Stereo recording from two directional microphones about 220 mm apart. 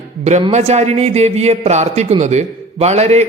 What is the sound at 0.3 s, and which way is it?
A man's voice, 30° right (ahead or behind).